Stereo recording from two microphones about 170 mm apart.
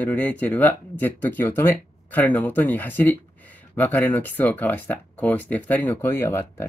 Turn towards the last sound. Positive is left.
turn(degrees=15)  # may be behind; listen again after turning